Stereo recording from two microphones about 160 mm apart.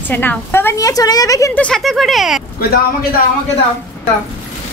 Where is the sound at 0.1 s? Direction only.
10° left (ahead or behind).